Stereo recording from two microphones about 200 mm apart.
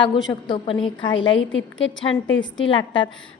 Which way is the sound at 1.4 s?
70° left (ahead or behind).